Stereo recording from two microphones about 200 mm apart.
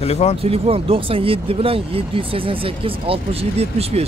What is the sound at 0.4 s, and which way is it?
Speech, 30° right (ahead or behind).